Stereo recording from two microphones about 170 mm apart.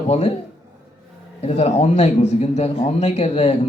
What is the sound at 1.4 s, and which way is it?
Speech, 40° left (ahead or behind).